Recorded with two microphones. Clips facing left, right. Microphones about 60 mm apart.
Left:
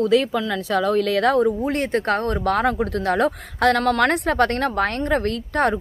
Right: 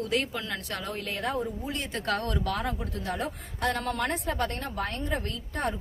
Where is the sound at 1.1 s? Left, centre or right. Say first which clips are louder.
Left 11 dB; left.